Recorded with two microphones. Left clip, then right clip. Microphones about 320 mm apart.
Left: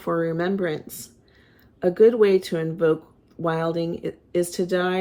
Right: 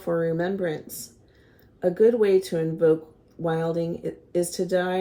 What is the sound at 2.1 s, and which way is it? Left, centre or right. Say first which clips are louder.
Speech: left 2 dB; left.